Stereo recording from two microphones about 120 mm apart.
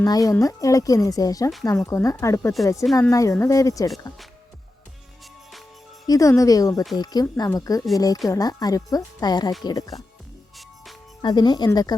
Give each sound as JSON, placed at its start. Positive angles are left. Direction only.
{"t": 0.0, "sound": "speech", "side_deg": 30}
{"t": 6.1, "sound": "speech", "side_deg": 30}
{"t": 11.2, "sound": "speech", "side_deg": 35}